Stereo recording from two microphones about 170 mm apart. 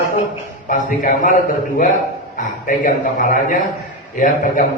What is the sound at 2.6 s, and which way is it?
Speech, 50° left (ahead or behind).